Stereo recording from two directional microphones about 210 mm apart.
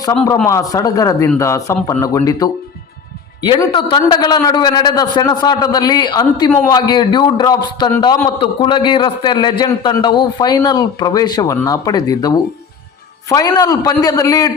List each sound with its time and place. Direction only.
0.4 s a man's voice: 15° left (ahead or behind)